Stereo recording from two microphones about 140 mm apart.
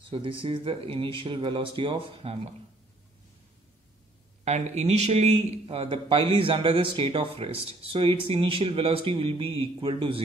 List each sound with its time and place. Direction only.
0.1 s speech: 40° right (ahead or behind)
4.5 s speech: 55° right (ahead or behind); by 10.2 s 40° right (ahead or behind)